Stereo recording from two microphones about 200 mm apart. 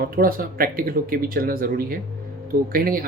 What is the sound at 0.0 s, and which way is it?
Speech, 45° right (ahead or behind).